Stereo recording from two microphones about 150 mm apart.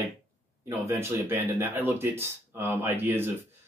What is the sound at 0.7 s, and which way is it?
Speech, 15° right (ahead or behind).